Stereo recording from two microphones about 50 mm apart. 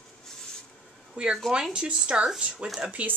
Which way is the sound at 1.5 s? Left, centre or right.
Centre.